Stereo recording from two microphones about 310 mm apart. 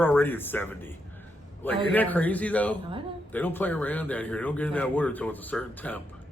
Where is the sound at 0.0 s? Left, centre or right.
Centre.